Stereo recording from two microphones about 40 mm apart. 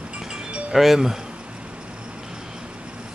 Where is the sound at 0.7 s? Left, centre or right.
Centre.